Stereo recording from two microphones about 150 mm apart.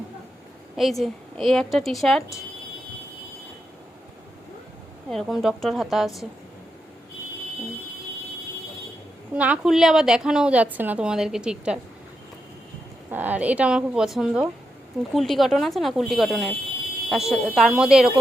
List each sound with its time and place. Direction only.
0.8 s a woman's voice: centre (ahead or behind)
5.0 s a woman's voice: centre (ahead or behind)
9.3 s a woman's voice: 10° right (ahead or behind)
13.1 s a woman's voice: 10° right (ahead or behind)